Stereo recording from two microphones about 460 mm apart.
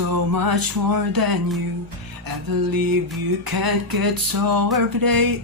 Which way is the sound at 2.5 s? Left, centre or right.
Right.